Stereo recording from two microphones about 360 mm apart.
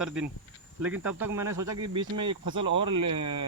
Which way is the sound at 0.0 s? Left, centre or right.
Centre.